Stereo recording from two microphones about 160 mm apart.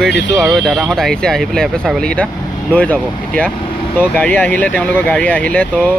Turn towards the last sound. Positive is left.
turn(degrees=10)  # may be behind; listen again after turning